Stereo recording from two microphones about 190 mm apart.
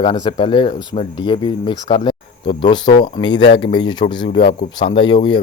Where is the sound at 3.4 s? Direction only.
70° left (ahead or behind).